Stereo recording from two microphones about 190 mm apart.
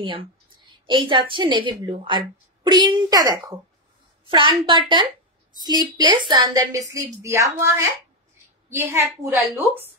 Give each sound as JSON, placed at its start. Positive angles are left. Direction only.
{"t": 0.0, "sound": "a woman's voice", "side_deg": -25}